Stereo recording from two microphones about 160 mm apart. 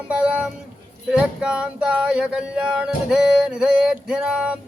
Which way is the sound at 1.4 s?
5° right (ahead or behind).